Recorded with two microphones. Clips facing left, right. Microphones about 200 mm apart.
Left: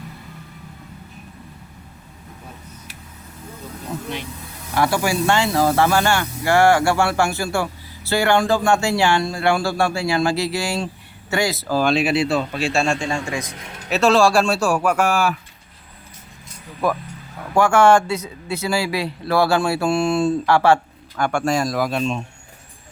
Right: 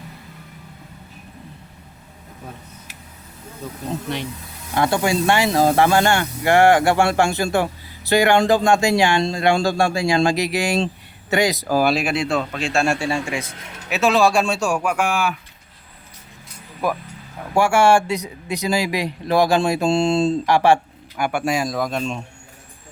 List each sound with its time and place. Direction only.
4.7 s speech: 20° right (ahead or behind); by 12.8 s 5° left (ahead or behind)
12.8 s speech: 10° right (ahead or behind)
14.9 s speech: 40° left (ahead or behind)
17.5 s speech: 10° right (ahead or behind)